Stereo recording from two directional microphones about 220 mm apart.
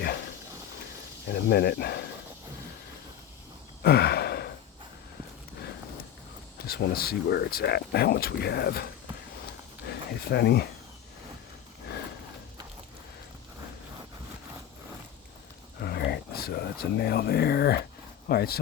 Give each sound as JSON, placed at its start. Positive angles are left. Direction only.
{"t": 1.3, "sound": "speech", "side_deg": 45}
{"t": 3.8, "sound": "a sound", "side_deg": 45}
{"t": 6.7, "sound": "speech", "side_deg": 45}
{"t": 15.8, "sound": "speech", "side_deg": 45}